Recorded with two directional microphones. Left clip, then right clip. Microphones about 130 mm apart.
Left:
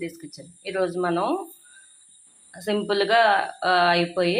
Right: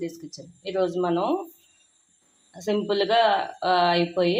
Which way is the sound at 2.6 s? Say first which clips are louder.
Left 1 dB; 10° right (ahead or behind).